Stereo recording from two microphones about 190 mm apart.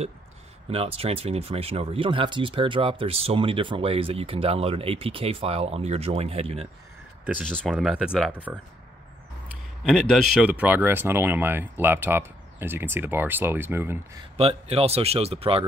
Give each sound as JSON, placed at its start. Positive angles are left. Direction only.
{"t": 0.7, "sound": "speech", "side_deg": -30}
{"t": 7.4, "sound": "speech", "side_deg": 5}
{"t": 9.8, "sound": "speech", "side_deg": 0}
{"t": 14.3, "sound": "speech", "side_deg": -30}